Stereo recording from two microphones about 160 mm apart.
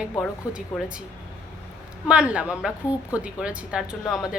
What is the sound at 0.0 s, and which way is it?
Speech, 5° right (ahead or behind).